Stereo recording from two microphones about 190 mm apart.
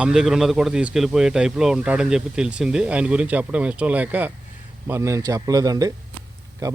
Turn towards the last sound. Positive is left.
turn(degrees=-20)  # may be behind; listen again after turning